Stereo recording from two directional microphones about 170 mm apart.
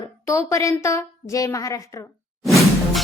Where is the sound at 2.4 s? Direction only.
Centre (ahead or behind).